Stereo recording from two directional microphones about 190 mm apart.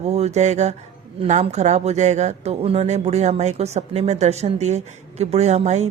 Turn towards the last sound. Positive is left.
turn(degrees=-35)  # may be behind; listen again after turning